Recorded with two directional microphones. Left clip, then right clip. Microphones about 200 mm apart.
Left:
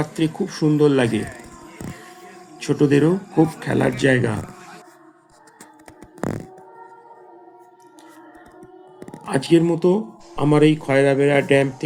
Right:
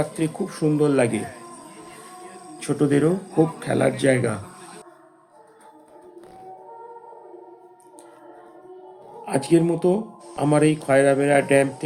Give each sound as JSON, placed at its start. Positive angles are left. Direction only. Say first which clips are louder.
{"t": 0.0, "sound": "speech", "louder": "left 2 dB", "side_deg": 10}
{"t": 2.6, "sound": "speech", "louder": "left 3 dB", "side_deg": 5}
{"t": 9.2, "sound": "speech", "louder": "left 2 dB", "side_deg": 10}